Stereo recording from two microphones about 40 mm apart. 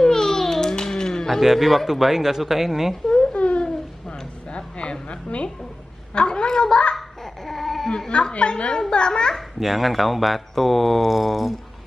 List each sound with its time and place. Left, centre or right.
0.0 s a sound: centre
1.4 s speech: centre
2.9 s speech: centre
3.3 s a sound: left
5.1 s a child's voice: left
7.4 s baby cry: centre
8.1 s a child's voice: left
9.6 s speech: centre